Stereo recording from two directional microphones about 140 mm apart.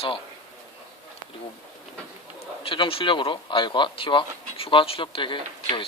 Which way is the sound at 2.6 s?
40° left (ahead or behind).